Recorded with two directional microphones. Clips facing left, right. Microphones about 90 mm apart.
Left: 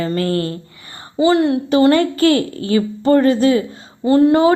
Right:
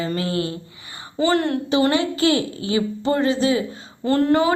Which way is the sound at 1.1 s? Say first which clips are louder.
Left 6 dB; 20° left (ahead or behind).